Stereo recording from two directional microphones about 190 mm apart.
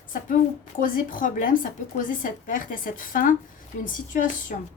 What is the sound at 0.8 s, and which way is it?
A woman's voice, 45° left (ahead or behind).